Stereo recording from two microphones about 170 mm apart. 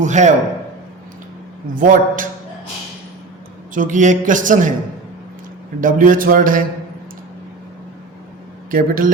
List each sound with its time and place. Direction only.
0.0 s speech: 45° right (ahead or behind)
1.7 s speech: 55° right (ahead or behind)
3.8 s speech: 50° right (ahead or behind)
5.8 s a man's voice: 55° right (ahead or behind)
8.7 s a man's voice: 55° right (ahead or behind)